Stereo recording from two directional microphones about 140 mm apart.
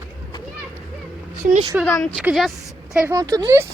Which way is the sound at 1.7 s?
10° right (ahead or behind).